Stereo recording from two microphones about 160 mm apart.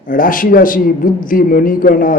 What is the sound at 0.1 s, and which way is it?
A man's voice, 60° left (ahead or behind).